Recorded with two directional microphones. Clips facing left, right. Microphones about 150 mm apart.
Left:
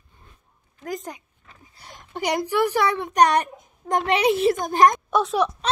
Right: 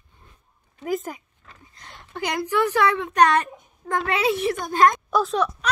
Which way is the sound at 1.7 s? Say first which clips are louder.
Left 1 dB; 15° left (ahead or behind).